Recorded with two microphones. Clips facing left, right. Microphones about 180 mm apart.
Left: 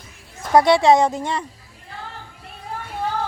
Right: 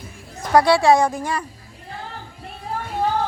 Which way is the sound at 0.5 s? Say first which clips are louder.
Left 1 dB; 20° left (ahead or behind).